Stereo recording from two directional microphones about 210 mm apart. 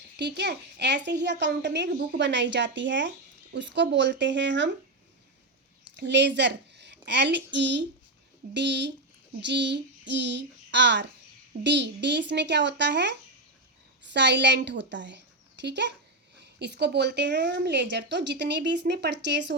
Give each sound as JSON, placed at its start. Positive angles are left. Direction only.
{"t": 0.2, "sound": "a child's voice", "side_deg": -55}
{"t": 6.0, "sound": "a woman's voice", "side_deg": -55}
{"t": 9.4, "sound": "child singing", "side_deg": -55}
{"t": 11.6, "sound": "a child's voice", "side_deg": -55}